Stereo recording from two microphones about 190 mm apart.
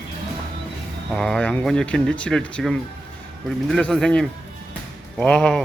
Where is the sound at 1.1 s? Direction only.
Centre (ahead or behind).